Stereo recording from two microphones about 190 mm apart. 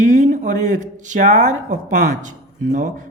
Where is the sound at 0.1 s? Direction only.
40° right (ahead or behind).